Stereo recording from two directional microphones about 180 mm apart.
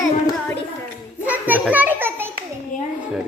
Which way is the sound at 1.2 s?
10° right (ahead or behind).